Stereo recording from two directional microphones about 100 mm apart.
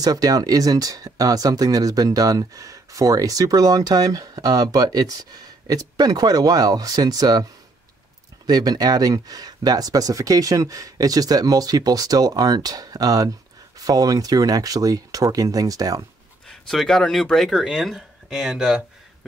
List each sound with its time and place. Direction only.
0.0 s speech: 40° right (ahead or behind)
8.5 s speech: 40° right (ahead or behind)
16.4 s speech: 5° left (ahead or behind)